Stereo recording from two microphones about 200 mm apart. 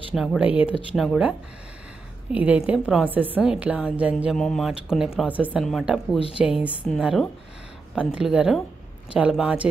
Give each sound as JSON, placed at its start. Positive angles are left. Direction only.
{"t": 0.1, "sound": "a woman's voice", "side_deg": 0}
{"t": 2.3, "sound": "a woman's voice", "side_deg": -5}
{"t": 6.1, "sound": "speech", "side_deg": 30}
{"t": 6.4, "sound": "a woman's voice", "side_deg": -5}